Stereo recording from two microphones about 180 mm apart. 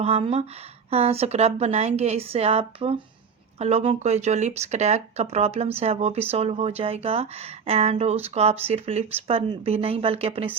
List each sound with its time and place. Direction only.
0.0 s speech: 35° right (ahead or behind)